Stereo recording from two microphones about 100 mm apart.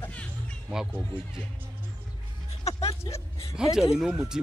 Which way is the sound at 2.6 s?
90° left.